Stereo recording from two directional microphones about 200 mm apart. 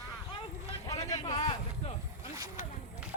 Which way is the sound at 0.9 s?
15° left (ahead or behind).